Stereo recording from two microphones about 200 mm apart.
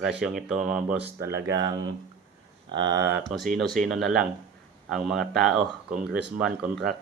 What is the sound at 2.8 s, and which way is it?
Speech, 60° right (ahead or behind).